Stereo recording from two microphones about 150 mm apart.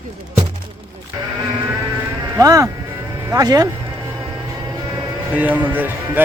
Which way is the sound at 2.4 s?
20° right (ahead or behind).